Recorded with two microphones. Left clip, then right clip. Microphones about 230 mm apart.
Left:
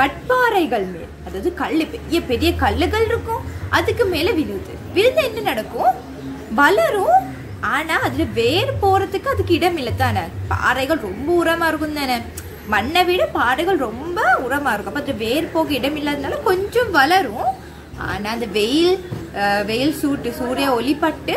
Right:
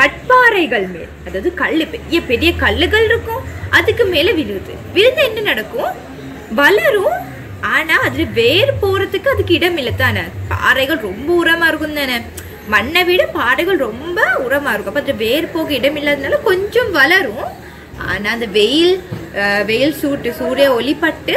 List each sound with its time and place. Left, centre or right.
0.5 s a woman's voice: centre